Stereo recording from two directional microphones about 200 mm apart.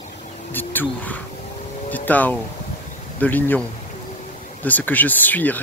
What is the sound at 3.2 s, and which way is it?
Speech, 10° left (ahead or behind).